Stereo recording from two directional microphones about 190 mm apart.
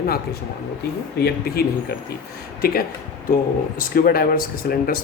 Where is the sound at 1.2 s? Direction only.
55° left (ahead or behind).